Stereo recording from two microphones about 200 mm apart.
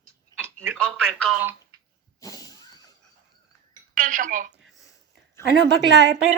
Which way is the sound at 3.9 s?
40° right (ahead or behind).